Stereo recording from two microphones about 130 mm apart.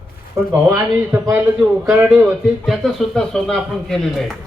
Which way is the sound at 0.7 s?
15° right (ahead or behind).